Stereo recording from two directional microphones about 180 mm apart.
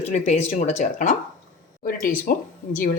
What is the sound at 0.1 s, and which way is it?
A woman's voice, 40° left (ahead or behind).